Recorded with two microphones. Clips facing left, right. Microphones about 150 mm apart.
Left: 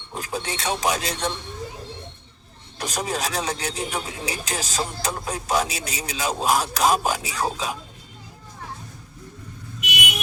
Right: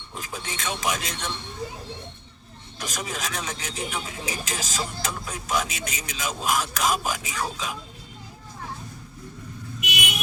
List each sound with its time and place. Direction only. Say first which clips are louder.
0.1 s speech: left 6 dB; 35° left (ahead or behind)
2.8 s speech: left 5 dB; 35° left (ahead or behind)